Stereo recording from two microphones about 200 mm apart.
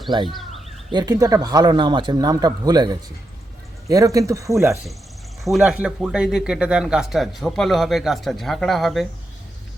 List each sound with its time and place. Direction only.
0.3 s speech: centre (ahead or behind)
0.9 s speech: 20° right (ahead or behind)
5.4 s speech: centre (ahead or behind)